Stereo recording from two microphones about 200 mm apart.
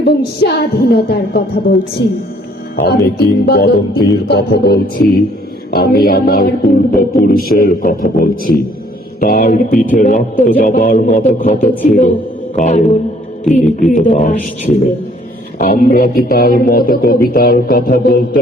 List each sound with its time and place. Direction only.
0.0 s a man's voice: 55° left (ahead or behind); by 12.8 s 35° left (ahead or behind)
13.9 s a man's voice: 40° left (ahead or behind)